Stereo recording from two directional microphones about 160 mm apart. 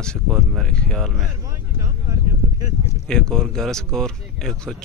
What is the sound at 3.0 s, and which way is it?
Speech, 5° left (ahead or behind).